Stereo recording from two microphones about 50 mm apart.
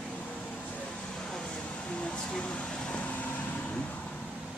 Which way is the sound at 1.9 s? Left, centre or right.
Left.